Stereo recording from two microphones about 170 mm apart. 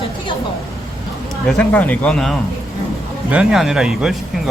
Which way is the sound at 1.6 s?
10° left (ahead or behind).